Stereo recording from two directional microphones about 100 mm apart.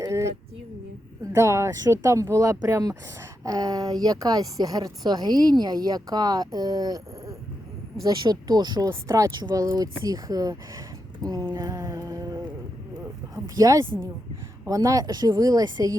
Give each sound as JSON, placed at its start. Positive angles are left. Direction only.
{"t": 0.0, "sound": "a sound", "side_deg": -30}
{"t": 1.2, "sound": "speech", "side_deg": -30}
{"t": 9.0, "sound": "speech", "side_deg": -30}